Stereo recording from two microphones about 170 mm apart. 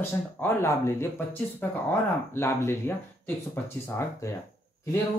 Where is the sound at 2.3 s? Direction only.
15° left (ahead or behind).